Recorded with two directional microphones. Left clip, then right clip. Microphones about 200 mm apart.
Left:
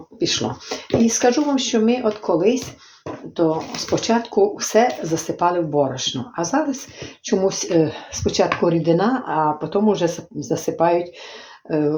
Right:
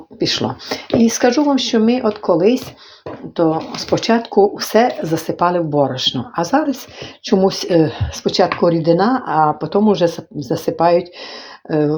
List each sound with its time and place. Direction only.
0.2 s speech: 40° right (ahead or behind)